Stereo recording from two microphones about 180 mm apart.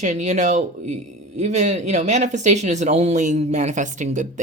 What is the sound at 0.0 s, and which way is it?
Speech, 40° right (ahead or behind).